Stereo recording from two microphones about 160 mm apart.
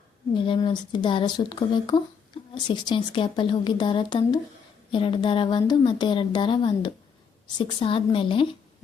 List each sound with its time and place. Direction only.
0.3 s a woman's voice: 30° left (ahead or behind)